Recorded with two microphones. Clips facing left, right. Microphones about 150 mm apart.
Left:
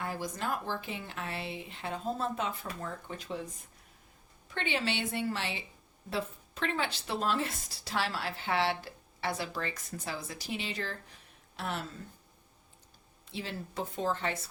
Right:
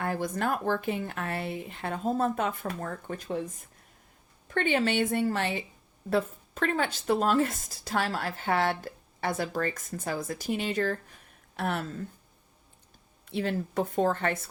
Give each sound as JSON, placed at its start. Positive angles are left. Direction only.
{"t": 0.0, "sound": "speech", "side_deg": -55}
{"t": 4.4, "sound": "speech", "side_deg": -50}
{"t": 13.2, "sound": "speech", "side_deg": -55}